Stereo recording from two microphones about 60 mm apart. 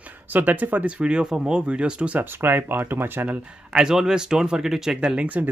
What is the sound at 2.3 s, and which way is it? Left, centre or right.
Speech, right.